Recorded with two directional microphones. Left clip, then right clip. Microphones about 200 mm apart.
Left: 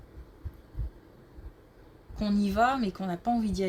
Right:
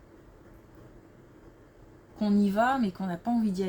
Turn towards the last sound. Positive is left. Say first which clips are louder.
# left 1 dB
turn(degrees=40)  # may be behind; listen again after turning